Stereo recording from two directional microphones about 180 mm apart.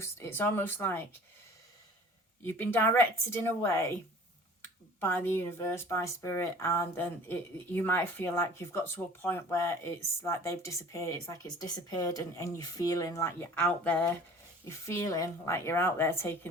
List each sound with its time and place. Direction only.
0.0 s speech: 15° left (ahead or behind)
2.5 s speech: 10° left (ahead or behind)
4.9 s speech: 10° left (ahead or behind)